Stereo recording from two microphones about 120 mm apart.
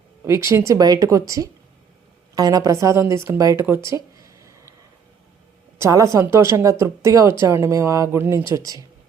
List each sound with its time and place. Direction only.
0.3 s speech: 20° right (ahead or behind)
5.8 s speech: 25° right (ahead or behind)